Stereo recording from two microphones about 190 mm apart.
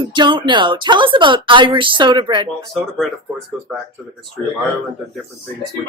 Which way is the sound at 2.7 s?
Centre (ahead or behind).